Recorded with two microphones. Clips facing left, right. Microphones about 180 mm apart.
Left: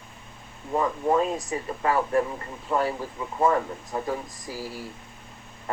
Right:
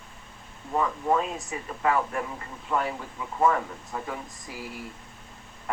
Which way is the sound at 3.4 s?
35° left (ahead or behind).